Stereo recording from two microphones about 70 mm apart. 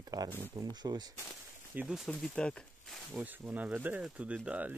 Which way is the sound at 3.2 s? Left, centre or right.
Right.